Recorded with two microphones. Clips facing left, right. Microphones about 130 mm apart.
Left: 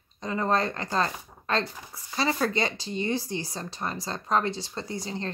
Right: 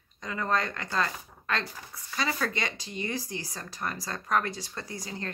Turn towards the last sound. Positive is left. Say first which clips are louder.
# left 5 dB
turn(degrees=25)  # may be behind; listen again after turning